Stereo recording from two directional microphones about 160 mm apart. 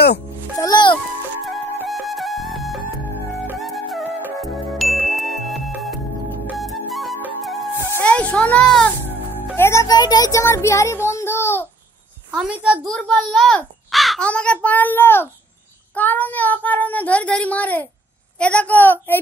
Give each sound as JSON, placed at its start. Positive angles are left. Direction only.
{"t": 0.6, "sound": "music", "side_deg": 25}
{"t": 1.9, "sound": "music", "side_deg": 0}
{"t": 8.0, "sound": "a sound", "side_deg": 10}
{"t": 12.3, "sound": "a child's voice", "side_deg": -5}
{"t": 12.9, "sound": "a child's voice", "side_deg": 5}